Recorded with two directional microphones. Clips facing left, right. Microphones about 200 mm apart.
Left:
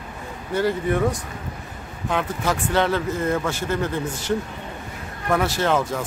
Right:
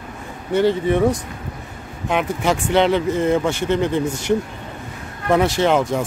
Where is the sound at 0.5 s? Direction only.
25° right (ahead or behind).